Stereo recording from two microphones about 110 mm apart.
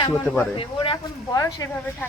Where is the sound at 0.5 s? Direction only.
55° left (ahead or behind).